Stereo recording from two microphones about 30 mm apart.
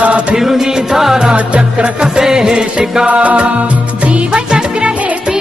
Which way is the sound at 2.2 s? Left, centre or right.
Right.